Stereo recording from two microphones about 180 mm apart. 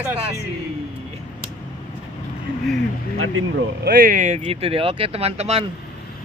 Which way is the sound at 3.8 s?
55° right (ahead or behind).